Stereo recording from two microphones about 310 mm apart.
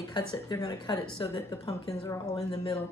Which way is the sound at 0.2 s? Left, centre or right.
Centre.